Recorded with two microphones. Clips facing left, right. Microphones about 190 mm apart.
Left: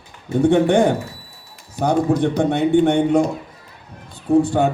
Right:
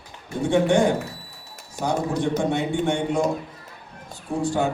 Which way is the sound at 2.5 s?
60° left (ahead or behind).